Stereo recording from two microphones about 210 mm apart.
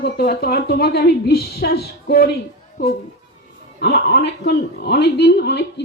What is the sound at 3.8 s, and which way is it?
Speech, 50° left (ahead or behind).